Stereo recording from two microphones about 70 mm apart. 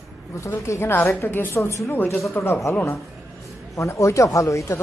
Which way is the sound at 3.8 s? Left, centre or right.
Left.